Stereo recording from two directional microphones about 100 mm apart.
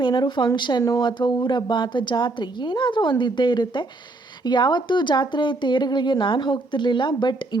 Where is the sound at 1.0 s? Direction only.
50° left (ahead or behind).